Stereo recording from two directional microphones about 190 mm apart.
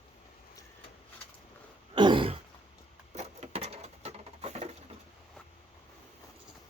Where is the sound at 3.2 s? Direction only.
35° right (ahead or behind).